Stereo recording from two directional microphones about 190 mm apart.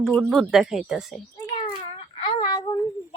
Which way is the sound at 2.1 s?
30° left (ahead or behind).